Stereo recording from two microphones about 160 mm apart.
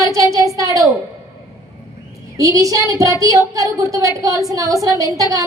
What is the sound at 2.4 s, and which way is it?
A woman's voice, 20° right (ahead or behind).